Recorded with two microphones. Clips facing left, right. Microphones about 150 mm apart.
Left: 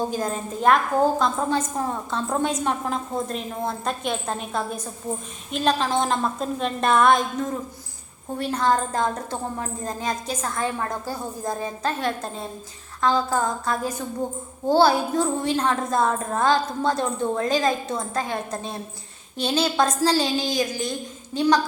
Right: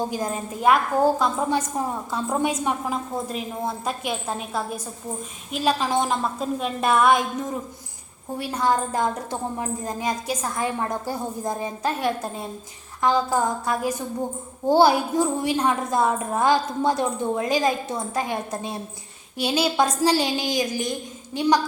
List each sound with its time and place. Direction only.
0.1 s a woman's voice: 10° right (ahead or behind)